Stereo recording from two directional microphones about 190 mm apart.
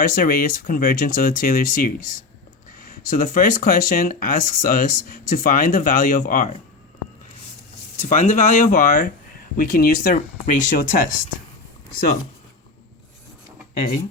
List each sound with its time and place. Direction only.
0.0 s speech: 50° left (ahead or behind)
7.9 s speech: 40° left (ahead or behind)